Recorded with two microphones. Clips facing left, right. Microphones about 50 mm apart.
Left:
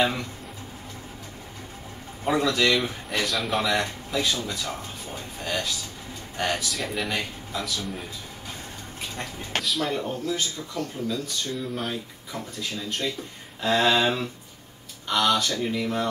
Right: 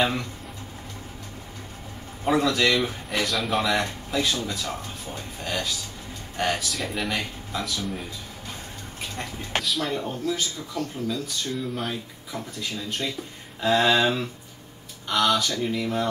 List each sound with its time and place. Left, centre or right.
0.0 s speech: centre
2.2 s speech: centre
9.0 s speech: centre